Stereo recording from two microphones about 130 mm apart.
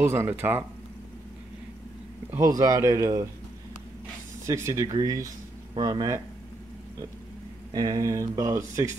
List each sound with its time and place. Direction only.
0.0 s speech: 20° right (ahead or behind)
2.3 s speech: 25° right (ahead or behind)
4.5 s speech: 20° right (ahead or behind)
7.7 s speech: 30° right (ahead or behind)